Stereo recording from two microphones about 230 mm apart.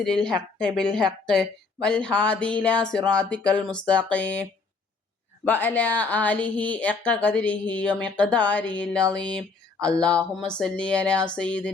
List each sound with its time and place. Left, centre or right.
0.0 s speech: centre
5.5 s speech: centre